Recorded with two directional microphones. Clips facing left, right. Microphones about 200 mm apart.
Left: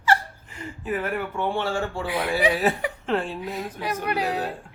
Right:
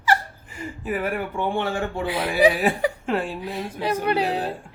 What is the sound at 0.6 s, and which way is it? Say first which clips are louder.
Speech: right 1 dB; 10° right (ahead or behind).